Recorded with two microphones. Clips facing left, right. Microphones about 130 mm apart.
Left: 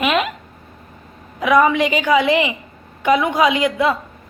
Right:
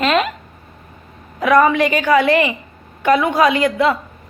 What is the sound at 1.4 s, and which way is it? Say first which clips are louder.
A woman's voice: right 1 dB; 10° left (ahead or behind).